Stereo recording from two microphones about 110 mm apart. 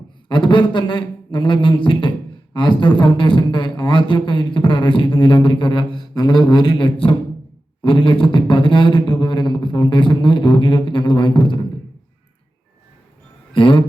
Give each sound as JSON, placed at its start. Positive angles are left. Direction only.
{"t": 0.3, "sound": "a man's voice", "side_deg": 45}
{"t": 13.5, "sound": "speech", "side_deg": 50}